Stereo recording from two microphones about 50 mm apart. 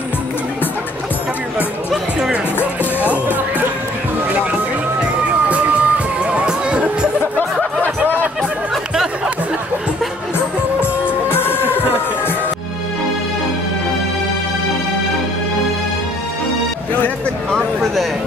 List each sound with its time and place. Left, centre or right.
1.9 s music: centre
3.1 s music: right
5.5 s music: right
7.8 s music: right
11.1 s music: left